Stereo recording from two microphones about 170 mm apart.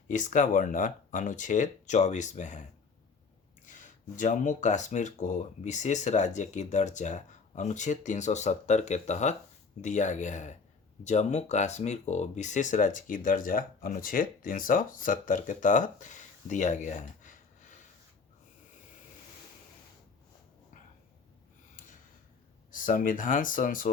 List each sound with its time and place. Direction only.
0.1 s speech: 50° left (ahead or behind)
3.7 s speech: 50° left (ahead or behind)
22.7 s speech: 55° left (ahead or behind)